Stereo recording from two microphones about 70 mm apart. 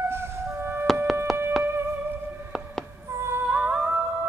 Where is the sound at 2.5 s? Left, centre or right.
Centre.